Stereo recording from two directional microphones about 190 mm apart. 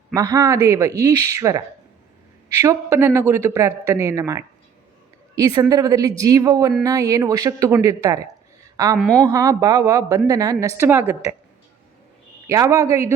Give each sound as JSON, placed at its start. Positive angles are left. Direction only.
{"t": 0.1, "sound": "a woman's voice", "side_deg": -20}
{"t": 8.7, "sound": "a sound", "side_deg": -20}
{"t": 9.0, "sound": "a woman's voice", "side_deg": 5}
{"t": 9.2, "sound": "a woman's voice", "side_deg": -20}
{"t": 12.5, "sound": "a woman's voice", "side_deg": -15}